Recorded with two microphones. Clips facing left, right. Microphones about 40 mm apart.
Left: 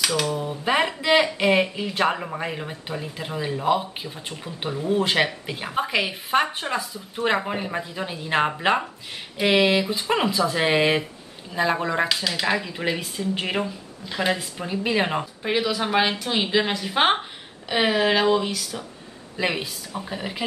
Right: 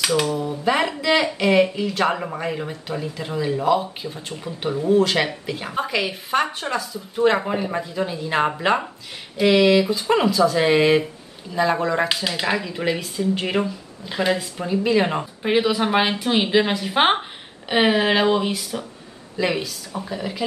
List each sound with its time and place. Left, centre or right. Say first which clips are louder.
0.0 s speech: right 3 dB; centre
0.4 s speech: right 2 dB; centre
2.1 s speech: right 3 dB; centre
4.9 s speech: right 2 dB; centre
7.3 s speech: right 3 dB; centre
8.5 s speech: right 2 dB; centre
9.4 s speech: right 4 dB; centre
12.2 s speech: right 1 dB; centre
15.4 s speech: right 6 dB; centre
19.3 s speech: right 3 dB; centre